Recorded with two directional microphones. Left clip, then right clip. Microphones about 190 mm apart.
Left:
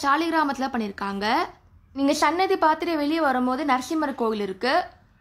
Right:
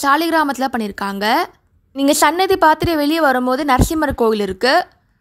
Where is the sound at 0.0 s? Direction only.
40° right (ahead or behind).